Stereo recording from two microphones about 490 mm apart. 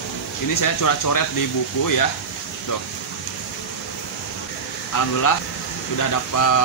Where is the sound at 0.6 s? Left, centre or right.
Left.